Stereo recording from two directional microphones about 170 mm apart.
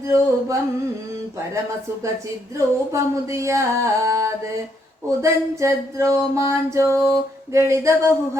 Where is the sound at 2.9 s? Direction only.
15° right (ahead or behind).